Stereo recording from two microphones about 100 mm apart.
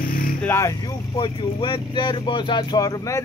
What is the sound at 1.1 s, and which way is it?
Speech, 55° left (ahead or behind).